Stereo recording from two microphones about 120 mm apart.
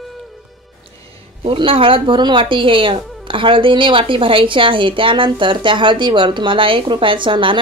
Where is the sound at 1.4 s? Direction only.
50° right (ahead or behind).